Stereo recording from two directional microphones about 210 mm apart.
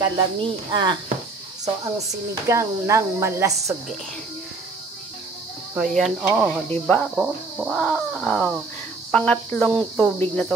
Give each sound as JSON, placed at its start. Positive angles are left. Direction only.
{"t": 0.0, "sound": "speech", "side_deg": -20}
{"t": 2.4, "sound": "speech", "side_deg": -15}
{"t": 5.8, "sound": "speech", "side_deg": 0}
{"t": 6.7, "sound": "speech", "side_deg": 5}
{"t": 7.2, "sound": "speech", "side_deg": -5}